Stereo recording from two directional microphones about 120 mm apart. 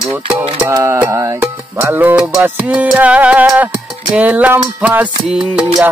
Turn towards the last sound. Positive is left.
turn(degrees=-10)  # may be behind; listen again after turning